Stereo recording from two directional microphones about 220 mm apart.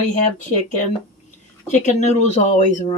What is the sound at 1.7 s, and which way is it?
Speech, 30° left (ahead or behind).